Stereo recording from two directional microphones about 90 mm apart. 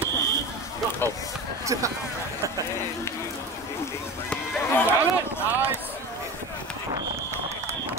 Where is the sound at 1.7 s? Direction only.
45° right (ahead or behind).